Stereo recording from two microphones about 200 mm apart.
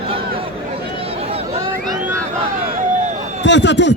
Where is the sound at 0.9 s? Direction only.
30° right (ahead or behind).